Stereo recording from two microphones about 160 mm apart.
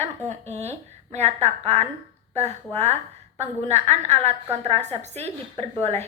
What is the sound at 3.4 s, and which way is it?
A woman's voice, 45° right (ahead or behind).